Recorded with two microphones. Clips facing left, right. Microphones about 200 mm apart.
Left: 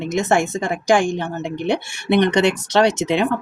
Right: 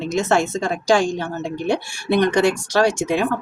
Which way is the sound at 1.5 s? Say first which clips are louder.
Left 1 dB; 65° left (ahead or behind).